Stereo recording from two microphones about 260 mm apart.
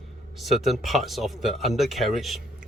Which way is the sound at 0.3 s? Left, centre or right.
Centre.